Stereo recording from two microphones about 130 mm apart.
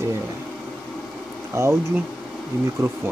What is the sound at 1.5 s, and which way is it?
Speech, 20° right (ahead or behind).